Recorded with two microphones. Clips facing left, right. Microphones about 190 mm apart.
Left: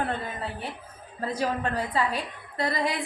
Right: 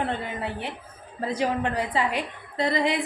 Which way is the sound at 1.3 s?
20° right (ahead or behind).